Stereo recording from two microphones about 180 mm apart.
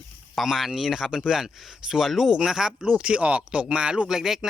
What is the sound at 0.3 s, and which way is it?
Speech, centre (ahead or behind).